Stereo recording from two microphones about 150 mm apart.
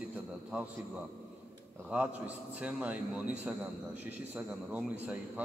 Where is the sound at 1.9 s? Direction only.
10° right (ahead or behind).